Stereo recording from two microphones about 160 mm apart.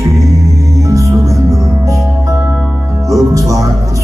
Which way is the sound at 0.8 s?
20° right (ahead or behind).